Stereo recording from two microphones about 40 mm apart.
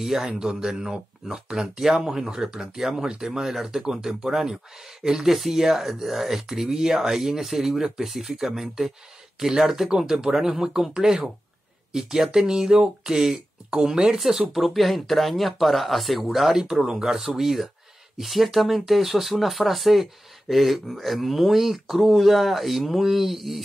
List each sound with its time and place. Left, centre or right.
0.0 s speech: centre
14.5 s speech: centre